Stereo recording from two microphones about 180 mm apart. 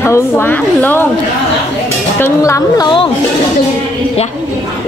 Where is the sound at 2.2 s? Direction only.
15° left (ahead or behind).